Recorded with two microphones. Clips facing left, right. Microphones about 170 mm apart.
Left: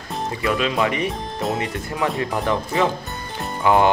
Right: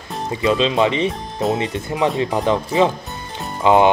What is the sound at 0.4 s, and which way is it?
Speech, 20° right (ahead or behind).